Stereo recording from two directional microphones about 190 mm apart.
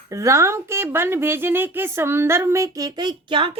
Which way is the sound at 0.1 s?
15° right (ahead or behind).